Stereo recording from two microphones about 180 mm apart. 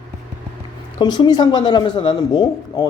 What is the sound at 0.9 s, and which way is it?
Speech, 25° left (ahead or behind).